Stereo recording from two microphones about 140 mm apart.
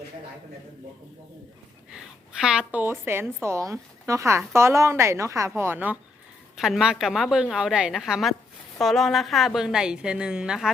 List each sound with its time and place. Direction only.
2.4 s a woman's voice: 5° right (ahead or behind)